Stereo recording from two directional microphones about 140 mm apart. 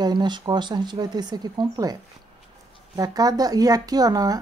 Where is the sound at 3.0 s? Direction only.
25° right (ahead or behind).